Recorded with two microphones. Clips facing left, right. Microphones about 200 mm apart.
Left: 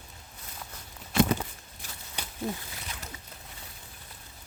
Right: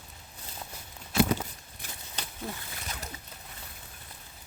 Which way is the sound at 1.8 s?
55° right (ahead or behind).